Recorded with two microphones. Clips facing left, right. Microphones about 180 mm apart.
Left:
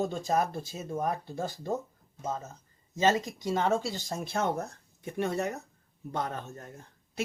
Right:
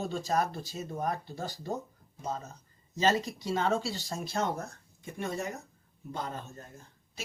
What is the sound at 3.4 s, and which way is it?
Speech, 50° left (ahead or behind).